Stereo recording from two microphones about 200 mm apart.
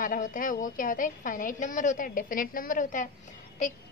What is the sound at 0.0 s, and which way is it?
A woman's voice, 40° left (ahead or behind).